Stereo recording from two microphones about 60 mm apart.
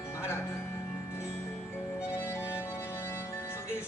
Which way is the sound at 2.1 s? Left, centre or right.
Left.